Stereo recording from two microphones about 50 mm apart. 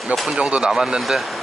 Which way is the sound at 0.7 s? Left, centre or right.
Centre.